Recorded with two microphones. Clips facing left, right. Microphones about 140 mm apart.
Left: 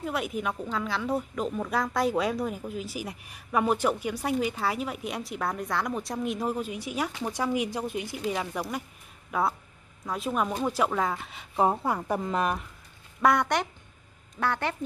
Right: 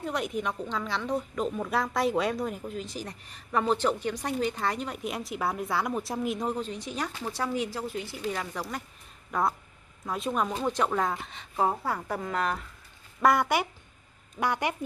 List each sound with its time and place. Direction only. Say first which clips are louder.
0.0 s a woman's voice: even; 5° left (ahead or behind)
11.5 s a woman's voice: left 3 dB; 20° left (ahead or behind)
13.2 s a woman's voice: even; 5° right (ahead or behind)